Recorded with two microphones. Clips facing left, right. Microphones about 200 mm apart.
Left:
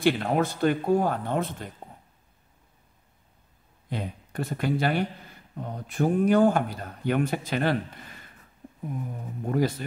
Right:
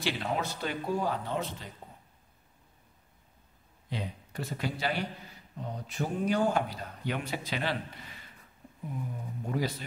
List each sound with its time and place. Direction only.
0.0 s speech: 55° left (ahead or behind)
3.9 s speech: 55° left (ahead or behind)
9.5 s speech: 50° left (ahead or behind)